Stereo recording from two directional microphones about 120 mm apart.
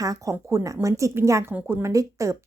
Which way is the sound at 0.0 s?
25° right (ahead or behind).